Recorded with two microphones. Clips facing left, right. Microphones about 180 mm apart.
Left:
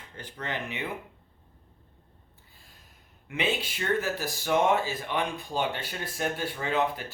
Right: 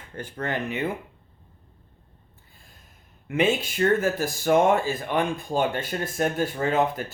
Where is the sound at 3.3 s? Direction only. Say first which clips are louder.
Right 7 dB; 45° right (ahead or behind).